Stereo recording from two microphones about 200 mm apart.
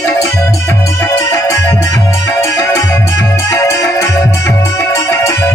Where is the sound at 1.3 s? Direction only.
15° left (ahead or behind).